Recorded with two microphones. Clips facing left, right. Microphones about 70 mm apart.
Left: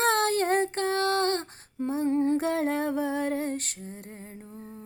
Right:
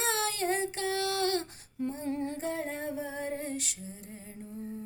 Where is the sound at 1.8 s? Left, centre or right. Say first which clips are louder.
Left 7 dB; left.